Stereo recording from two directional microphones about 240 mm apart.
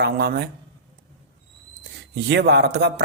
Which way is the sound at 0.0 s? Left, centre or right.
Right.